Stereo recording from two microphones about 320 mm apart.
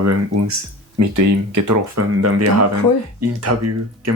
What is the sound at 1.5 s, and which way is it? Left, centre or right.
Speech, right.